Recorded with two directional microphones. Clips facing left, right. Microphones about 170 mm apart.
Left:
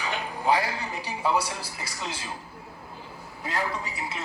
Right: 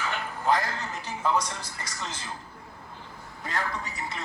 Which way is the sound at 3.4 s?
10° left (ahead or behind).